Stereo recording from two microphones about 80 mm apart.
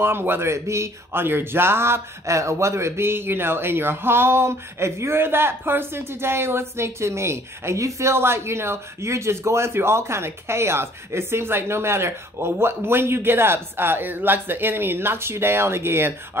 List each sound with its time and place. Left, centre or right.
0.0 s speech: right